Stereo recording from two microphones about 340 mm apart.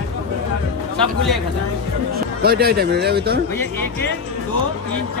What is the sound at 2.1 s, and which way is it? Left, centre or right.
Speech, right.